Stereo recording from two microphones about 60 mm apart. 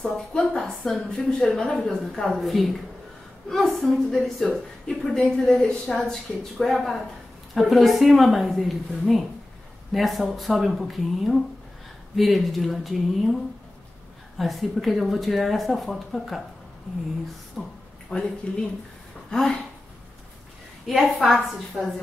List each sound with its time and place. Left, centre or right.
0.3 s a woman's voice: centre
14.4 s speech: centre
17.6 s a woman's voice: centre
18.1 s a woman's voice: centre
20.8 s speech: centre